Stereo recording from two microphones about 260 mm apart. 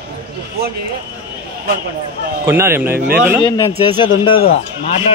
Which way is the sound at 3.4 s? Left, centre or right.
Centre.